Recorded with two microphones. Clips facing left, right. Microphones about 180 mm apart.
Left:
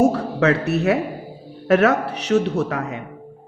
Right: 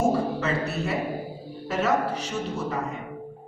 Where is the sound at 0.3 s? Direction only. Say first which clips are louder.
Left 9 dB; 70° left (ahead or behind).